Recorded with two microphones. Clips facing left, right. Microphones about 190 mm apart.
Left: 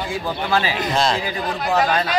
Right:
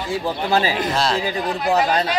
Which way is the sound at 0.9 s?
5° right (ahead or behind).